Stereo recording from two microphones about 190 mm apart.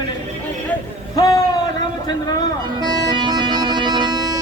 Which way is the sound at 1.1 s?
20° left (ahead or behind).